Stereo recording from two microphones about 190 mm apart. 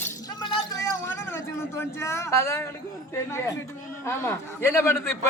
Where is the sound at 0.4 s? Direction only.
20° left (ahead or behind).